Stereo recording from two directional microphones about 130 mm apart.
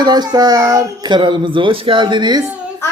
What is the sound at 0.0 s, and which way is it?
A woman's voice, 30° right (ahead or behind).